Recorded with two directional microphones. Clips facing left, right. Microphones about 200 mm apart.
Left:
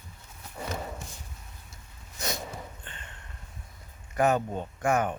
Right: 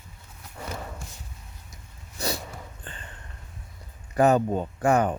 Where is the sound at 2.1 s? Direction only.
35° right (ahead or behind).